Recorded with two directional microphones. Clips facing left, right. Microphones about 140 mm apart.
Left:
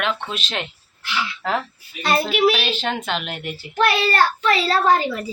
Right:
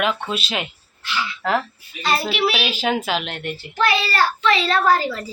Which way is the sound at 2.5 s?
10° right (ahead or behind).